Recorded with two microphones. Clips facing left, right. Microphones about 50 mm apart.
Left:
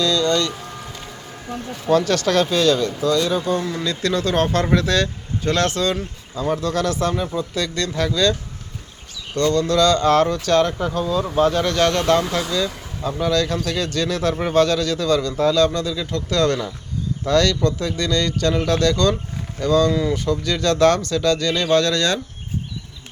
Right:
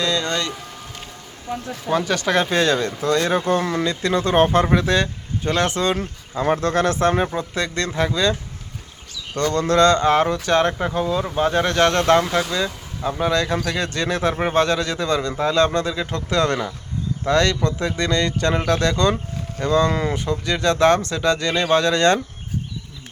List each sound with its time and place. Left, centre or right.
0.0 s speech: right
1.9 s speech: centre
2.5 s speech: right
3.8 s speech: right
19.9 s speech: right
20.1 s speech: right